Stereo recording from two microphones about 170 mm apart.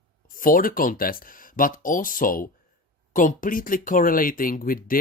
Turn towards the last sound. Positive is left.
turn(degrees=55)  # may be behind; listen again after turning